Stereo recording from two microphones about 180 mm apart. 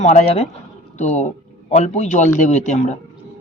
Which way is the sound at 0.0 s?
40° left (ahead or behind).